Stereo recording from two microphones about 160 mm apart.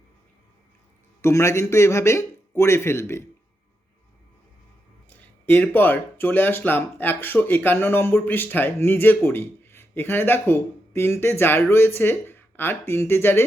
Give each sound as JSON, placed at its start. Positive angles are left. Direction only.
{"t": 1.2, "sound": "speech", "side_deg": 15}
{"t": 5.5, "sound": "speech", "side_deg": 10}